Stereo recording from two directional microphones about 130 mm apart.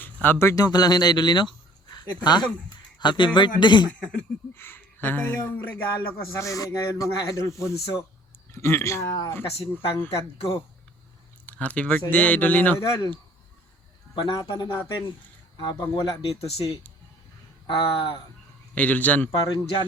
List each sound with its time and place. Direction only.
0.0 s speech: 15° left (ahead or behind); by 3.8 s 35° left (ahead or behind)
4.0 s speech: 10° left (ahead or behind); by 9.4 s 25° left (ahead or behind)
11.4 s speech: 10° left (ahead or behind)
14.2 s speech: 35° left (ahead or behind)
18.7 s speech: 10° left (ahead or behind)